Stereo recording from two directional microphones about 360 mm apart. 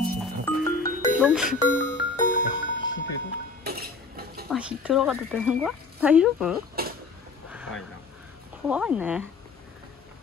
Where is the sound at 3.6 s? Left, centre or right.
Right.